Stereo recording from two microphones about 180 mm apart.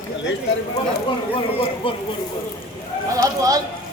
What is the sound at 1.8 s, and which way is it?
Speech, 30° left (ahead or behind).